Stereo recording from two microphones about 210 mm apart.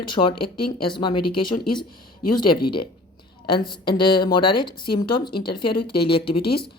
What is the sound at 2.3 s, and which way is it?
A woman's voice, 20° left (ahead or behind).